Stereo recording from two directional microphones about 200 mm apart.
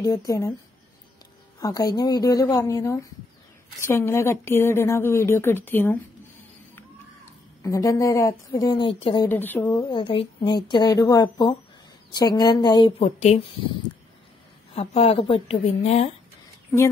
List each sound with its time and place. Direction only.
0.0 s a woman's voice: 15° left (ahead or behind)
1.6 s a woman's voice: 20° left (ahead or behind)
7.6 s a woman's voice: 15° left (ahead or behind)
9.3 s speech: 10° left (ahead or behind)
13.0 s speech: 35° left (ahead or behind)
14.7 s speech: 30° left (ahead or behind)